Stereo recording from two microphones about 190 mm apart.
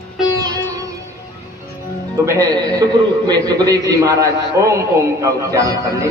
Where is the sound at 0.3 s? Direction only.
20° right (ahead or behind).